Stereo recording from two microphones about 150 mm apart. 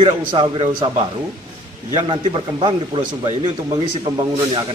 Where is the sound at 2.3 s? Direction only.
35° right (ahead or behind).